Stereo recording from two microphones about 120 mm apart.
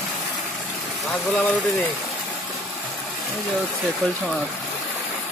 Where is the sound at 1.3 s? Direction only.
10° left (ahead or behind).